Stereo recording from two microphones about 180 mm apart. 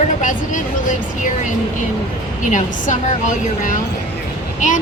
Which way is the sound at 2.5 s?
45° left (ahead or behind).